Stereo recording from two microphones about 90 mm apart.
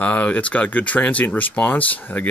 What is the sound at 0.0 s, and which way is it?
Speech, 15° left (ahead or behind).